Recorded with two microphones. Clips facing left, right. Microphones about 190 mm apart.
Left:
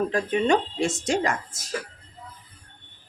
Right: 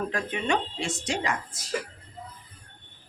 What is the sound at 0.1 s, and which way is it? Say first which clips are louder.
A woman's voice: left 6 dB; 35° left (ahead or behind).